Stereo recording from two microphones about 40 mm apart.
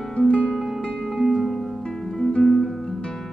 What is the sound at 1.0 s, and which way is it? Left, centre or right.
Music, centre.